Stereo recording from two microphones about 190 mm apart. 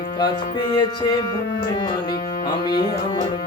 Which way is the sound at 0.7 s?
20° left (ahead or behind).